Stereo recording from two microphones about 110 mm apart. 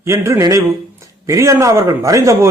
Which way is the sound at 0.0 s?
25° right (ahead or behind).